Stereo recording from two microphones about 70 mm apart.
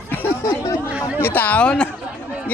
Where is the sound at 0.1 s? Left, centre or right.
Left.